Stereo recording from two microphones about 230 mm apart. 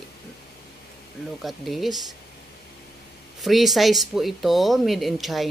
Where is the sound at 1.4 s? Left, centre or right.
Centre.